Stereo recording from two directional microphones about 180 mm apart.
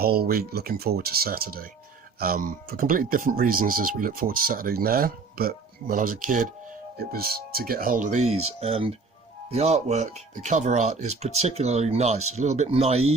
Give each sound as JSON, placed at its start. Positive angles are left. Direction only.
{"t": 0.0, "sound": "speech", "side_deg": -60}
{"t": 6.9, "sound": "speech", "side_deg": -60}